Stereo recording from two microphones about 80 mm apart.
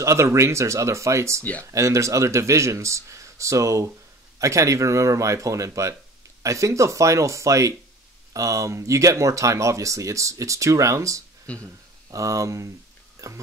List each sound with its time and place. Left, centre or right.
0.0 s speech: right
1.4 s speech: centre
1.7 s speech: right
11.5 s speech: centre
12.1 s speech: right